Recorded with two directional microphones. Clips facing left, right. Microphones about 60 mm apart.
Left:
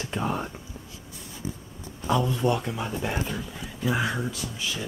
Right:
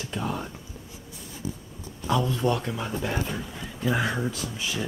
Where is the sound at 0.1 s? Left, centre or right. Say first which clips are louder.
Left 2 dB; left.